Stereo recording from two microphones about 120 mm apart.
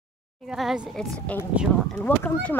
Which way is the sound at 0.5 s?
5° right (ahead or behind).